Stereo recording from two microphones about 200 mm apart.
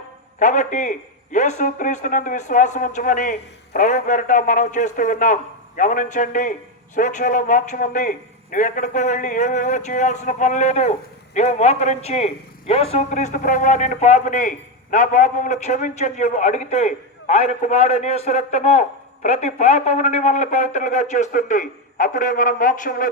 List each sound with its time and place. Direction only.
0.3 s a man's voice: 40° left (ahead or behind)